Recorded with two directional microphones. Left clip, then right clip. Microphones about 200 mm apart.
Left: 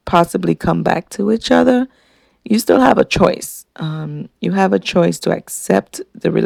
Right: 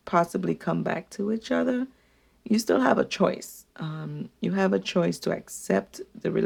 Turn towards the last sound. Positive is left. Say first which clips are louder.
# left 10 dB
turn(degrees=35)  # may be behind; listen again after turning